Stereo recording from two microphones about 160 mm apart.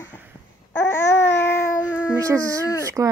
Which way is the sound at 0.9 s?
15° left (ahead or behind).